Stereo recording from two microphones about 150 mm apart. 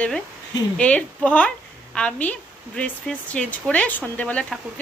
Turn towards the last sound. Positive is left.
turn(degrees=10)  # may be behind; listen again after turning